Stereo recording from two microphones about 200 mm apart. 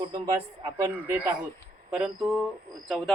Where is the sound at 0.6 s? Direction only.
15° right (ahead or behind).